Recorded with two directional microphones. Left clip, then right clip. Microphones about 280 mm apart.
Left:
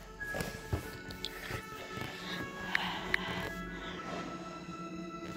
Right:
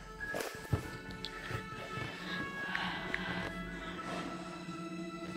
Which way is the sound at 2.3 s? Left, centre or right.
Centre.